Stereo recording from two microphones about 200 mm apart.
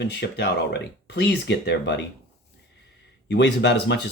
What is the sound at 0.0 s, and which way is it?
Speech, 60° left (ahead or behind).